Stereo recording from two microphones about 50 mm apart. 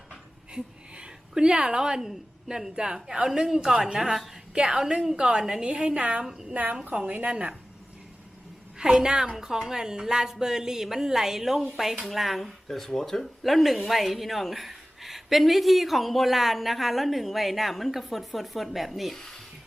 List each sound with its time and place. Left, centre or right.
0.5 s a sound: centre
1.3 s a woman's voice: centre
6.5 s a woman's voice: right
8.8 s a woman's voice: centre
19.1 s speech: centre